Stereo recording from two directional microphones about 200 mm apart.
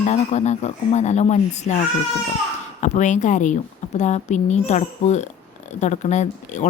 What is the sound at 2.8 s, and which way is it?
Speech, 35° left (ahead or behind).